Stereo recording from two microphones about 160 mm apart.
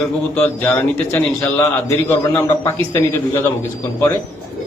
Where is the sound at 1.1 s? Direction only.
20° left (ahead or behind).